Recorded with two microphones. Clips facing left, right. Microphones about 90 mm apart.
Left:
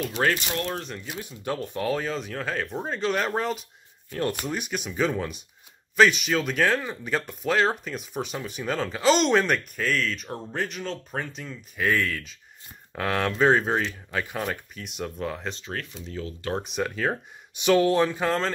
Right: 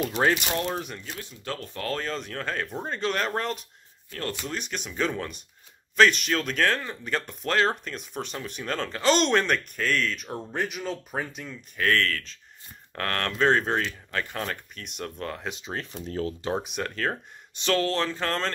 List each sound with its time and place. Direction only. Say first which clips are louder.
0.0 s speech: right 1 dB; 20° right (ahead or behind)
1.0 s speech: left 4 dB; 15° left (ahead or behind)
4.1 s speech: left 5 dB; 15° left (ahead or behind)
15.5 s speech: even; 20° right (ahead or behind)
15.9 s speech: right 4 dB; 45° right (ahead or behind)
16.5 s speech: left 2 dB; centre (ahead or behind)